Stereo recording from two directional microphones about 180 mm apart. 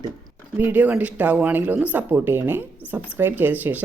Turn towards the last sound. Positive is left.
turn(degrees=-10)  # may be behind; listen again after turning